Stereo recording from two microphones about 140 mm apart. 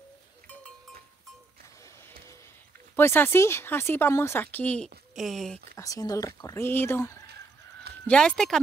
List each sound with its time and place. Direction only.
3.0 s speech: 15° left (ahead or behind)
5.1 s speech: centre (ahead or behind)
5.8 s speech: 25° left (ahead or behind)
8.1 s speech: 5° left (ahead or behind)